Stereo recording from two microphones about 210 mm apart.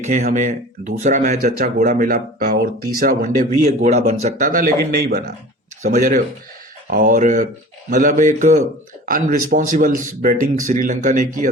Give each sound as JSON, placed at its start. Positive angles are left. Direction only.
{"t": 0.0, "sound": "speech", "side_deg": -35}